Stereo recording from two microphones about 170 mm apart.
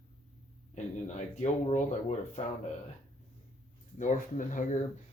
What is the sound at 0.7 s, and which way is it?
Speech, 45° left (ahead or behind).